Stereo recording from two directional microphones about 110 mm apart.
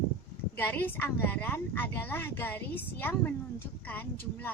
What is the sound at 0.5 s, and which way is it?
A woman's voice, 15° left (ahead or behind).